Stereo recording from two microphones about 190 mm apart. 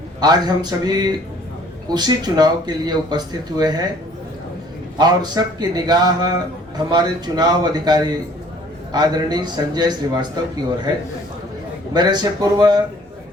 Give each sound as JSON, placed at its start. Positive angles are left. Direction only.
{"t": 0.2, "sound": "speech", "side_deg": -20}
{"t": 4.9, "sound": "speech", "side_deg": -20}
{"t": 11.9, "sound": "speech", "side_deg": -20}